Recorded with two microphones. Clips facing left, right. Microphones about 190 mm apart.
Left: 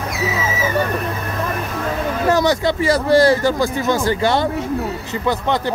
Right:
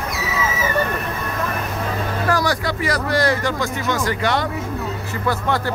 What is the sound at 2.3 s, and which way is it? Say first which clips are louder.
Speech: left 5 dB; 25° left (ahead or behind).